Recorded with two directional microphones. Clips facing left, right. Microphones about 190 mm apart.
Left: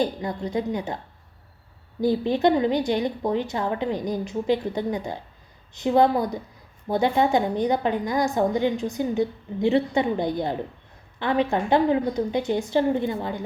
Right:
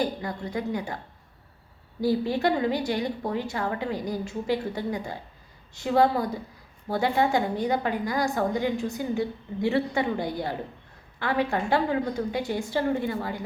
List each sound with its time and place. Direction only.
0.0 s a woman's voice: 20° left (ahead or behind)
2.0 s a woman's voice: 20° left (ahead or behind)